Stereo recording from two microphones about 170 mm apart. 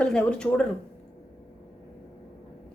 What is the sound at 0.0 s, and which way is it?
Speech, 5° left (ahead or behind).